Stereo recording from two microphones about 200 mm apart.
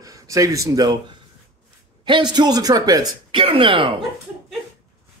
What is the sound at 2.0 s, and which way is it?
Speech, 25° right (ahead or behind).